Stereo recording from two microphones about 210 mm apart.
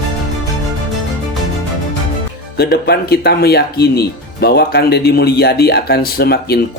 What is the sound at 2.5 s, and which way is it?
Speech, 50° left (ahead or behind).